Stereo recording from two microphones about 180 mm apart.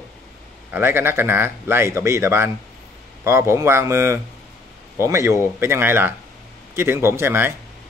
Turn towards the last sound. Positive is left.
turn(degrees=-15)  # may be behind; listen again after turning